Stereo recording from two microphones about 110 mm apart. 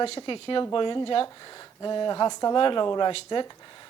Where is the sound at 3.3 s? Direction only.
50° left (ahead or behind).